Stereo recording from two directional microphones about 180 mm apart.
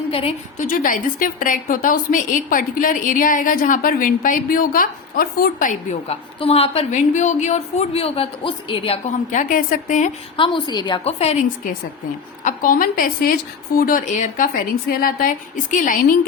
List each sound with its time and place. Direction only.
0.1 s a woman's voice: 30° left (ahead or behind)
0.6 s a woman's voice: 50° left (ahead or behind)
6.1 s a woman's voice: 35° left (ahead or behind)
10.3 s a woman's voice: 25° left (ahead or behind)
12.5 s a woman's voice: 50° left (ahead or behind)